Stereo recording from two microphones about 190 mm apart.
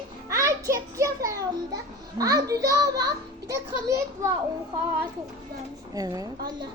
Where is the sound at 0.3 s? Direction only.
15° right (ahead or behind).